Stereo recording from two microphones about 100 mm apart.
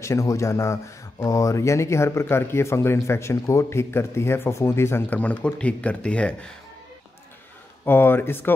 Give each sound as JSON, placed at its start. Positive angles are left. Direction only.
{"t": 0.0, "sound": "speech", "side_deg": 30}
{"t": 5.2, "sound": "speech", "side_deg": 15}
{"t": 7.8, "sound": "speech", "side_deg": 25}